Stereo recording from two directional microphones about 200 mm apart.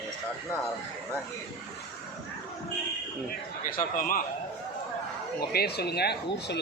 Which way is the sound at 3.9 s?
45° left (ahead or behind).